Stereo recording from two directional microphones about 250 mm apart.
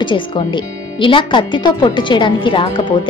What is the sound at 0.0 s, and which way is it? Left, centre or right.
A woman's voice, centre.